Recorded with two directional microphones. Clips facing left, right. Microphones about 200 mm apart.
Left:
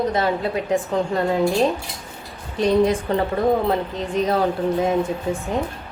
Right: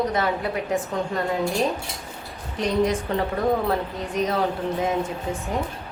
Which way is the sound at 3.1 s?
35° left (ahead or behind).